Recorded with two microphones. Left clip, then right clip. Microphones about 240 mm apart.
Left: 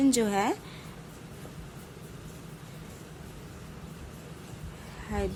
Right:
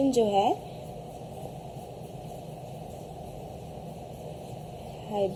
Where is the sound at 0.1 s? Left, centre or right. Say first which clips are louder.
Right 4 dB; left.